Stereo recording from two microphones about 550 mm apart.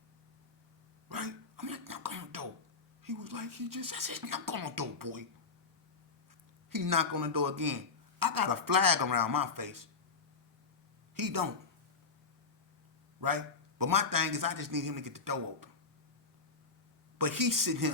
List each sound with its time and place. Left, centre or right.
1.1 s a sound: right
3.0 s speech: right
6.7 s a man's voice: right
11.1 s speech: right
13.2 s a man's voice: right
17.2 s a man's voice: right